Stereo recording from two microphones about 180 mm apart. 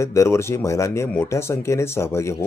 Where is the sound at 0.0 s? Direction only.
15° left (ahead or behind).